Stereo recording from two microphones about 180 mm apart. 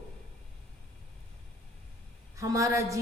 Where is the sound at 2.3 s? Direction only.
20° right (ahead or behind).